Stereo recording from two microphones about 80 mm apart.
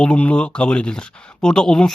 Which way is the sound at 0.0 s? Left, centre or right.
Centre.